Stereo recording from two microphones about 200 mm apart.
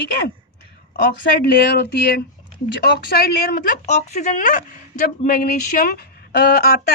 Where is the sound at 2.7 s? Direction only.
55° left (ahead or behind).